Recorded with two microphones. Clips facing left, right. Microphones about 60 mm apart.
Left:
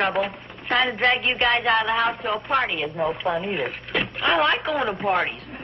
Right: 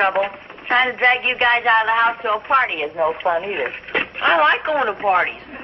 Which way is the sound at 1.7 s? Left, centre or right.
Right.